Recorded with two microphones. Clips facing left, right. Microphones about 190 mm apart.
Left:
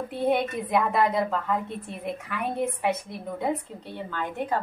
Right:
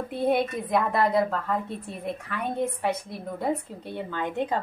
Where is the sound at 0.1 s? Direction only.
10° right (ahead or behind).